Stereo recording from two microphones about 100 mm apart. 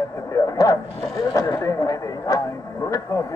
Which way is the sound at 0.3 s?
35° left (ahead or behind).